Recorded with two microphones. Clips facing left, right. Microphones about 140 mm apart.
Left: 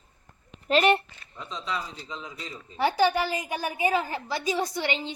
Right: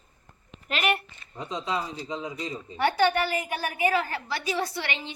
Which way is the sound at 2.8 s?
10° left (ahead or behind).